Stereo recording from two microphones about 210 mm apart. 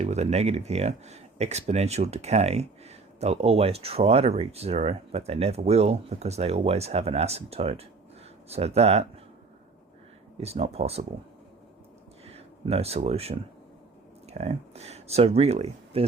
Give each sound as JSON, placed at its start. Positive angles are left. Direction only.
{"t": 0.0, "sound": "speech", "side_deg": -30}
{"t": 10.3, "sound": "speech", "side_deg": -30}
{"t": 12.2, "sound": "speech", "side_deg": -30}